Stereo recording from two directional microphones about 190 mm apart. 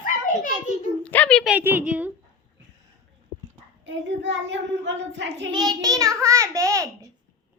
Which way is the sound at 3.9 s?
70° right (ahead or behind).